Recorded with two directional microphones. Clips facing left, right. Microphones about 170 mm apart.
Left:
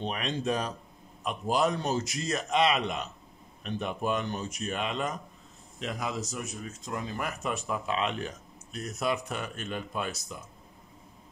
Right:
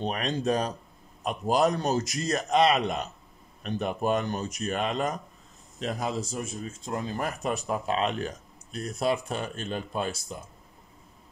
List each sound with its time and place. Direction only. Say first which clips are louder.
0.0 s speech: right 3 dB; 40° right (ahead or behind)